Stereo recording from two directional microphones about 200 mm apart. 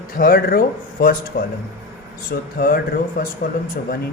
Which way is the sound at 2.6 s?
45° left (ahead or behind).